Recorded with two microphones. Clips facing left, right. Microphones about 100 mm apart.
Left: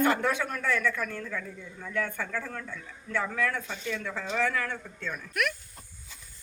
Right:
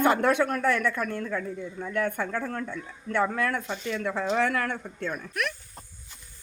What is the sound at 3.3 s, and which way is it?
Speech, 55° right (ahead or behind).